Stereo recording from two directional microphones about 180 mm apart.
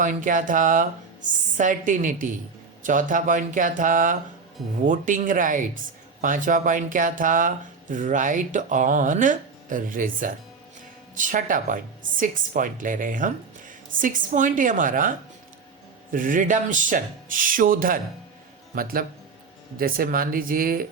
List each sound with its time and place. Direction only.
0.0 s speech: 45° right (ahead or behind)
16.1 s speech: 45° right (ahead or behind)